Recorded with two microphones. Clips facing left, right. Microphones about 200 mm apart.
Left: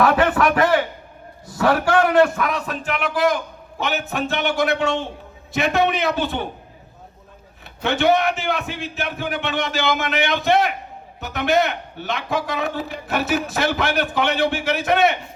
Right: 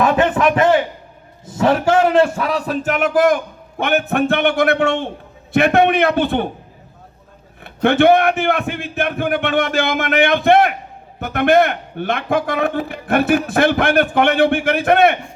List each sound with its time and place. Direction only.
0.0 s a sound: 20° right (ahead or behind)
1.5 s a man's voice: 25° right (ahead or behind); by 6.5 s 60° right (ahead or behind)
7.6 s a man's voice: 55° right (ahead or behind)